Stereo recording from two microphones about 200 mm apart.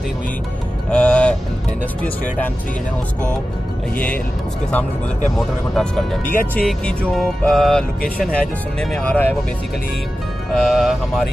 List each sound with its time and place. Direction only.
0.8 s music: 5° left (ahead or behind)
3.9 s speech: 5° left (ahead or behind)
5.4 s music: centre (ahead or behind)
10.5 s music: centre (ahead or behind)